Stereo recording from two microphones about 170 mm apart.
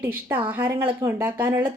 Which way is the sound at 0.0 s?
10° right (ahead or behind).